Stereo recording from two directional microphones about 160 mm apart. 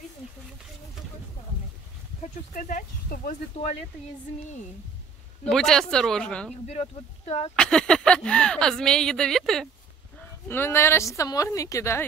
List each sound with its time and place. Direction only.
2.5 s speech: 55° left (ahead or behind)
5.4 s speech: centre (ahead or behind)
6.7 s speech: 40° left (ahead or behind)
7.5 s speech: 5° left (ahead or behind)
10.5 s speech: 15° left (ahead or behind)